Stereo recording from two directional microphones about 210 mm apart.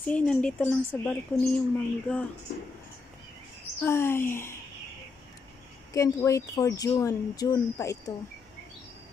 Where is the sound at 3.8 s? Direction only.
10° left (ahead or behind).